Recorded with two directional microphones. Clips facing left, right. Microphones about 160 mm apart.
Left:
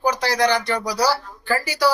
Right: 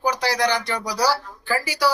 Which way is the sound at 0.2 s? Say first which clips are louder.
Left 2 dB; 15° right (ahead or behind).